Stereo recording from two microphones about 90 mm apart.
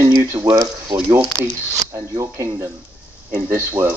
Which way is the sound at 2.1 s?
40° right (ahead or behind).